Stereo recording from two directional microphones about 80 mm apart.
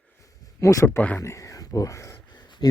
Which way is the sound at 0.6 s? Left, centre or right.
Left.